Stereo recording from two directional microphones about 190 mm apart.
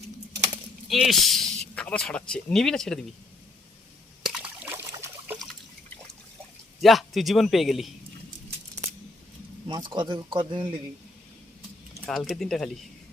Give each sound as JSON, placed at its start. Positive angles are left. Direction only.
{"t": 0.9, "sound": "speech", "side_deg": 0}
{"t": 4.2, "sound": "trickle", "side_deg": -5}
{"t": 6.8, "sound": "a man's voice", "side_deg": 0}
{"t": 9.6, "sound": "a man's voice", "side_deg": -25}
{"t": 12.0, "sound": "a man's voice", "side_deg": 0}